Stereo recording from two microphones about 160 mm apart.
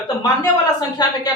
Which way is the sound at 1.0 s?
25° left (ahead or behind).